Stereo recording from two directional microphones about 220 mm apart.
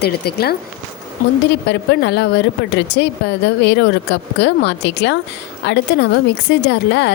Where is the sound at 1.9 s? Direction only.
50° left (ahead or behind).